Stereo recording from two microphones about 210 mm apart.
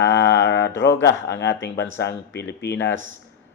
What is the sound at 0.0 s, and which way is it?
Mantra, 55° left (ahead or behind).